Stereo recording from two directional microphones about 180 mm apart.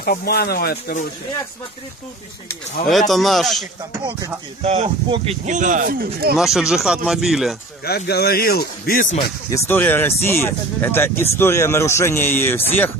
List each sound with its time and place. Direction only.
0.0 s speech: 60° left (ahead or behind)
2.9 s speech: centre (ahead or behind)
4.6 s speech: 35° right (ahead or behind); by 6.3 s 55° right (ahead or behind)
6.3 s speech: centre (ahead or behind)
7.8 s speech: 60° left (ahead or behind)
9.5 s speech: 10° left (ahead or behind)